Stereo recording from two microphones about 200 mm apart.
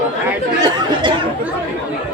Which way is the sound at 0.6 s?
25° right (ahead or behind).